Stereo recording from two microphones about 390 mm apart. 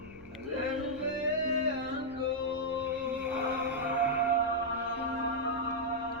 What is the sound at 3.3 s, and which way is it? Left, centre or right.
Music, right.